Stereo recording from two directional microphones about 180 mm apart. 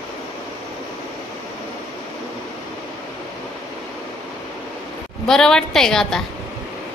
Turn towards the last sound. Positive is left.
turn(degrees=0)  # may be behind; listen again after turning